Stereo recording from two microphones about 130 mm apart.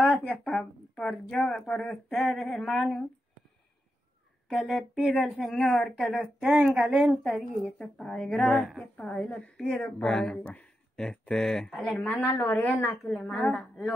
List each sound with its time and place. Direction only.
0.1 s a woman's voice: 5° left (ahead or behind)
4.5 s a woman's voice: centre (ahead or behind)
12.3 s speech: 20° left (ahead or behind)
12.5 s a woman's voice: 10° left (ahead or behind)